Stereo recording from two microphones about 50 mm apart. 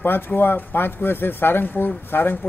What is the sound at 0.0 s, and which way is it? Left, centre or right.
Speech, left.